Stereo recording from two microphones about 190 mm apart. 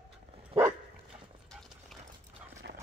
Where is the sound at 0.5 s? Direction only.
30° right (ahead or behind).